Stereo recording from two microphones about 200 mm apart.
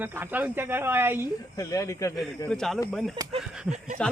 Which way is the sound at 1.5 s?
15° left (ahead or behind).